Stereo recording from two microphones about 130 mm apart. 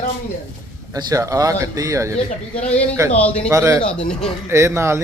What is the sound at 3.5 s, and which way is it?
Speech, 20° right (ahead or behind).